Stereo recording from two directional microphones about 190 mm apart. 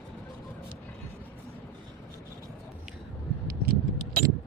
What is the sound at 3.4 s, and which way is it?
Keys jangling, 50° right (ahead or behind).